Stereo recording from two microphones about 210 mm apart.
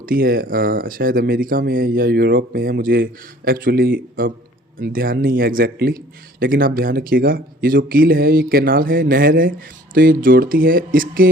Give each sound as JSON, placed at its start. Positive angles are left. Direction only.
{"t": 0.0, "sound": "speech", "side_deg": -45}